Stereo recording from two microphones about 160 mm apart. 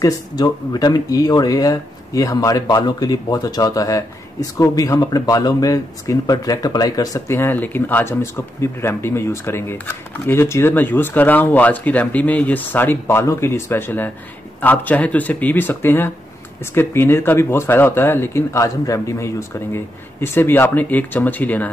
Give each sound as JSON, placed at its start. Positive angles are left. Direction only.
{"t": 0.0, "sound": "speech", "side_deg": 25}